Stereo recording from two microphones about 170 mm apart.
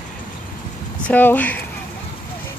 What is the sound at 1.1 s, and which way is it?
Speech, 10° left (ahead or behind).